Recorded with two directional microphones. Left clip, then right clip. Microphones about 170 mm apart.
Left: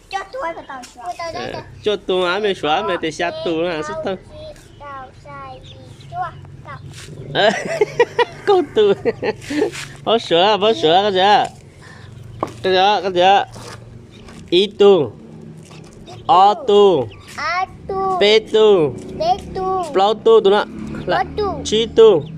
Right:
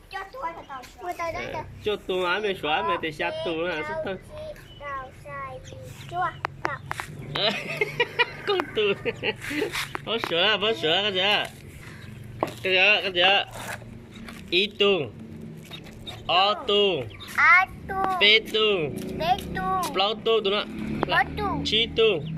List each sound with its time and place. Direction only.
1.4 s speech: 25° left (ahead or behind)
7.3 s speech: 40° left (ahead or behind)
12.6 s speech: 30° left (ahead or behind)
14.5 s speech: 35° left (ahead or behind)
16.2 s a child's voice: 35° left (ahead or behind)